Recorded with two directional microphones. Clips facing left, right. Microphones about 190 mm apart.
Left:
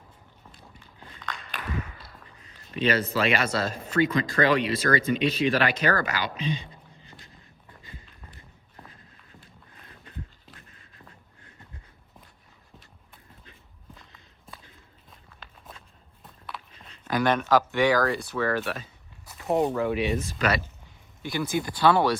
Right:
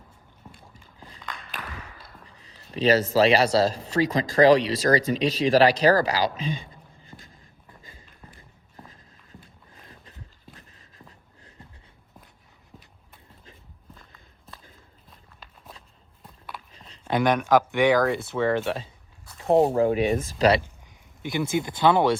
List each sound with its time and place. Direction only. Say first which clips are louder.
2.7 s speech: right 5 dB; 40° right (ahead or behind)
16.9 s a sound: right 2 dB; 25° right (ahead or behind)
17.2 s speech: right 2 dB; 10° right (ahead or behind)
19.4 s speech: right 5 dB; 35° right (ahead or behind)
21.2 s speech: right 2 dB; 20° right (ahead or behind)